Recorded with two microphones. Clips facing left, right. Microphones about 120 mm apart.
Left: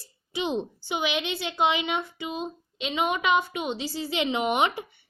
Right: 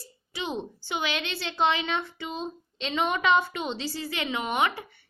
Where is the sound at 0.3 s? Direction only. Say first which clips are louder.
Left 4 dB; 20° left (ahead or behind).